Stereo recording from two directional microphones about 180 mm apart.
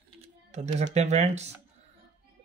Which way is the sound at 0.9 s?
35° right (ahead or behind).